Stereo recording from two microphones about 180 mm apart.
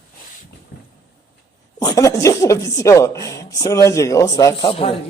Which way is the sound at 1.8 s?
20° left (ahead or behind).